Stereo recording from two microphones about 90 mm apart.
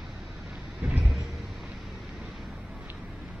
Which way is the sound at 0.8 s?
20° right (ahead or behind).